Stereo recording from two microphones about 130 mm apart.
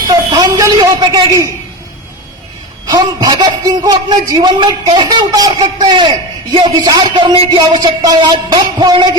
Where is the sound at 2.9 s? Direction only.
30° right (ahead or behind).